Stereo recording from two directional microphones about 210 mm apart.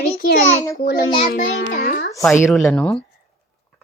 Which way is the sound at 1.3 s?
50° left (ahead or behind).